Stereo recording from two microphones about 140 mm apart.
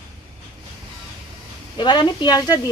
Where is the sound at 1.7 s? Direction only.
35° left (ahead or behind).